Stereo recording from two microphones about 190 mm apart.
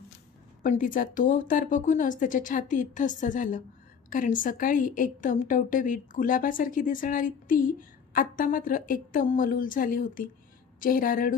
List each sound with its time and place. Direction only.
0.6 s a woman's voice: 45° left (ahead or behind)